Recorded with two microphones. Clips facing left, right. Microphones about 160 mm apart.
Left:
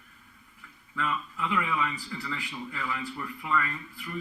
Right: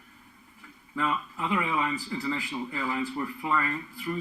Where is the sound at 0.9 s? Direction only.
30° right (ahead or behind).